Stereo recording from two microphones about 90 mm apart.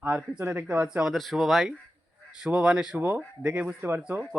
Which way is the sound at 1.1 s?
Centre (ahead or behind).